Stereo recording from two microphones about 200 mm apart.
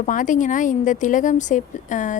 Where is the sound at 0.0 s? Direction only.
40° left (ahead or behind).